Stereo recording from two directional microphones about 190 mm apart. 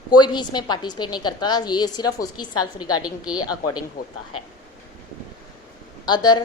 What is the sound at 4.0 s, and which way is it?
Speech, 50° left (ahead or behind).